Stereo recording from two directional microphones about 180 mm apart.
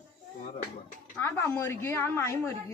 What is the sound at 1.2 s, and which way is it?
Speech, 15° left (ahead or behind).